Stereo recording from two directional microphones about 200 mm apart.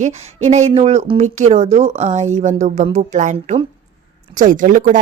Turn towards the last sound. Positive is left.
turn(degrees=-40)  # may be behind; listen again after turning